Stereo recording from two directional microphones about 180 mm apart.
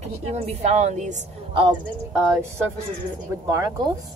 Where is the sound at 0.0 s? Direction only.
35° right (ahead or behind).